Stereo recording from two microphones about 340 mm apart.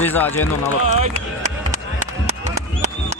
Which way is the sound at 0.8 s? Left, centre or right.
Centre.